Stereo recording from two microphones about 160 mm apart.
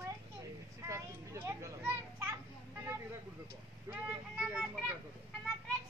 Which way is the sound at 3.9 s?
20° right (ahead or behind).